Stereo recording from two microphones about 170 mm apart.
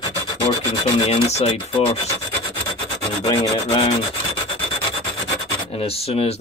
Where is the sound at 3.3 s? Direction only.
30° left (ahead or behind).